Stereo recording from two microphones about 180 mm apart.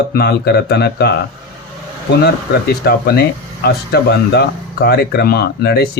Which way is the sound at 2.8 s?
60° left (ahead or behind).